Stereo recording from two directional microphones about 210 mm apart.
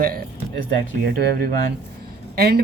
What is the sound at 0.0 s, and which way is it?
Speech, 45° right (ahead or behind).